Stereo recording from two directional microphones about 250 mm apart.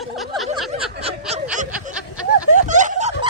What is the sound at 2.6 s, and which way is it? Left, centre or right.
Snicker, right.